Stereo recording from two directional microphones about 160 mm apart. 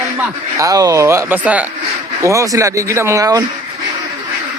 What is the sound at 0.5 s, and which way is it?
Speech, 20° right (ahead or behind).